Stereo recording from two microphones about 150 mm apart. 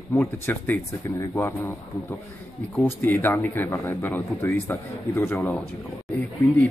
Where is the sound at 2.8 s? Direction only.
10° left (ahead or behind).